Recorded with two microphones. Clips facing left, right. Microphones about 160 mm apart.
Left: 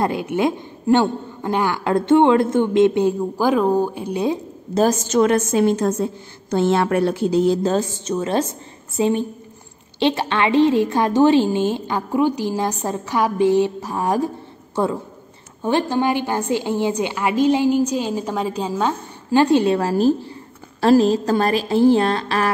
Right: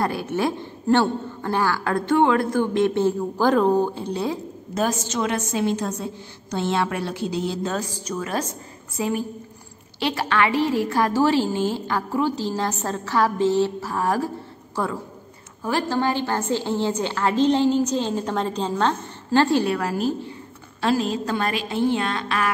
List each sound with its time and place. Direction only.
0.0 s a woman's voice: 20° left (ahead or behind)
4.7 s a woman's voice: 45° left (ahead or behind)
7.7 s a woman's voice: 25° left (ahead or behind)
15.6 s a woman's voice: 20° left (ahead or behind); by 22.5 s 35° left (ahead or behind)